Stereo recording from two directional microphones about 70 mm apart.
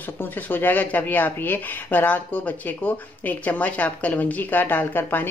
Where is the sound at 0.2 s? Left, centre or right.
Left.